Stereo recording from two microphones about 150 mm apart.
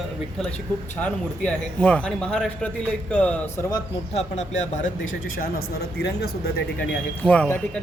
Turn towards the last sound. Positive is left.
turn(degrees=10)  # may be behind; listen again after turning